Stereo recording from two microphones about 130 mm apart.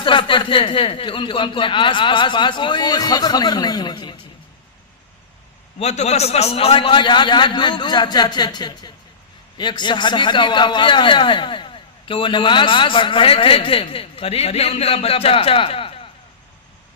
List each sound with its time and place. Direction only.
0.0 s a man's voice: 40° left (ahead or behind)
5.8 s a man's voice: 60° left (ahead or behind)